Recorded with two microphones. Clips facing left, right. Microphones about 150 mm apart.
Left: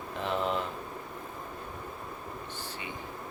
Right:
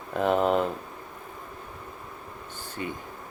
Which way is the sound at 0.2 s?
45° right (ahead or behind).